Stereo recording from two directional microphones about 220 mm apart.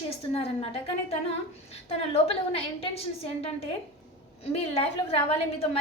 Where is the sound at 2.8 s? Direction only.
25° left (ahead or behind).